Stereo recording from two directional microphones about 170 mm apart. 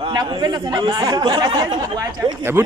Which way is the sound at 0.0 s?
25° right (ahead or behind).